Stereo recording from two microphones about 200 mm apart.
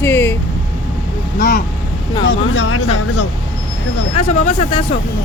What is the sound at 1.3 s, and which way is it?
Speech, 50° left (ahead or behind).